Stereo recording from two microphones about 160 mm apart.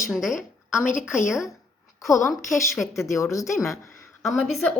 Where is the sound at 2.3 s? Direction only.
Centre (ahead or behind).